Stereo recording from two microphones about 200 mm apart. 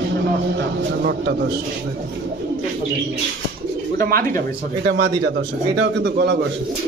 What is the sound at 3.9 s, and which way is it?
A man's voice, 50° right (ahead or behind).